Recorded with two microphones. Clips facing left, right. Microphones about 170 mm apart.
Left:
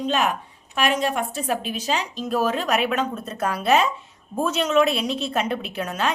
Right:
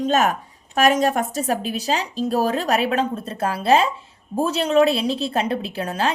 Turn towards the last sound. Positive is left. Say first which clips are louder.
# right 2 dB
turn(degrees=-30)  # may be behind; listen again after turning